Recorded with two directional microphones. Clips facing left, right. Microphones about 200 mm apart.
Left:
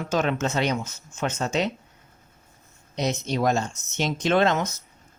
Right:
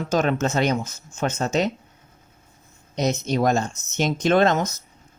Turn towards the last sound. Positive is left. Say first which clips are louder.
# right 3 dB
turn(degrees=-45)  # may be behind; listen again after turning